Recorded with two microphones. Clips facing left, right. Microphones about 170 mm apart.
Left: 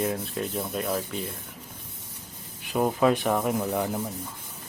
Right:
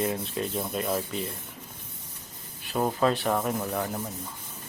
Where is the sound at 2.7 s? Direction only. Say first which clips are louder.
Left 3 dB; 5° left (ahead or behind).